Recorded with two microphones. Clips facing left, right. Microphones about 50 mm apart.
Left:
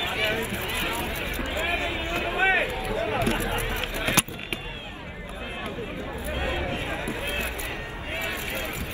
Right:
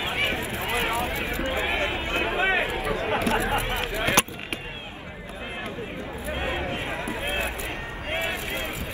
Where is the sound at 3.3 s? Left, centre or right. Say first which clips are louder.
Right 3 dB; right.